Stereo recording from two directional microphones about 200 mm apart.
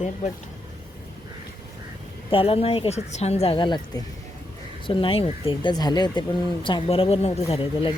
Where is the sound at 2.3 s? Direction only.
25° left (ahead or behind).